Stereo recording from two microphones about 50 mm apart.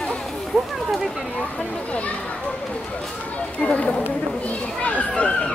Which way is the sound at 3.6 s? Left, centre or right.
Left.